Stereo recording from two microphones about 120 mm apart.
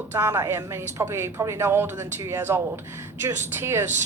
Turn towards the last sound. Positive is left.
turn(degrees=-20)  # may be behind; listen again after turning